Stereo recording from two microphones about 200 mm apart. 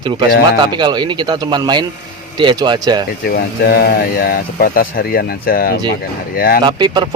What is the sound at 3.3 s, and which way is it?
Speech, 50° left (ahead or behind).